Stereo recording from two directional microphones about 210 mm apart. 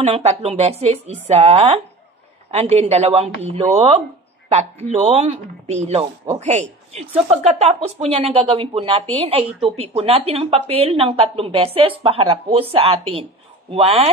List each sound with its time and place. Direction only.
0.0 s speech: 30° right (ahead or behind)